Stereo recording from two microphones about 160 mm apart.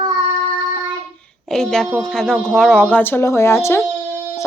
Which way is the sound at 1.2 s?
Centre (ahead or behind).